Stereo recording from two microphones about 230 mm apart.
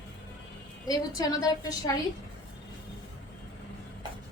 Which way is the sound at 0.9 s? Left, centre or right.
Centre.